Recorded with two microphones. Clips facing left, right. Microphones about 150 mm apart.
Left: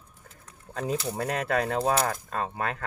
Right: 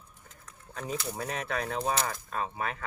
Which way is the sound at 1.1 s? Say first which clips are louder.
Left 6 dB; 70° left (ahead or behind).